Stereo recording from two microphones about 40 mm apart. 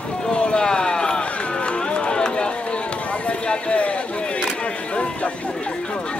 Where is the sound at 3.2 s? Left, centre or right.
Left.